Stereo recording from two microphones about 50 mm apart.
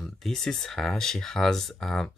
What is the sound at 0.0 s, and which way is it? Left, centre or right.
Speech, centre.